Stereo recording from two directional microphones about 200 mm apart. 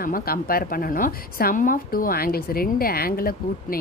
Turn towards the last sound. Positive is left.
turn(degrees=45)  # may be behind; listen again after turning